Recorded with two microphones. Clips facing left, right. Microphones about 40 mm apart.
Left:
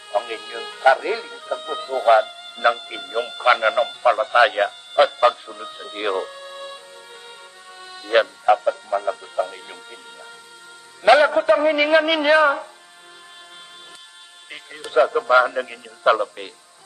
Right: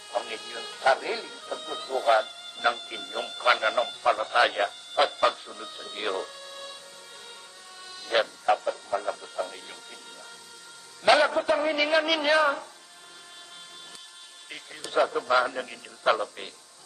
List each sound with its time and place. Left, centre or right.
0.1 s speech: left
7.8 s a man's voice: left
14.5 s speech: left